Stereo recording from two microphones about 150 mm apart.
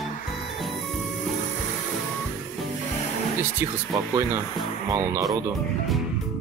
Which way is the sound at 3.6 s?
15° right (ahead or behind).